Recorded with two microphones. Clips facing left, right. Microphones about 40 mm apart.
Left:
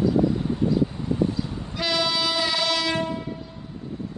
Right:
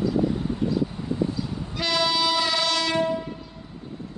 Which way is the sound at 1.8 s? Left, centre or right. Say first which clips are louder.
Right 1 dB; centre.